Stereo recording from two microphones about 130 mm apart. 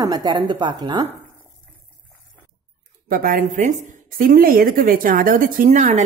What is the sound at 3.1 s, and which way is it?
A woman's voice, 90° right.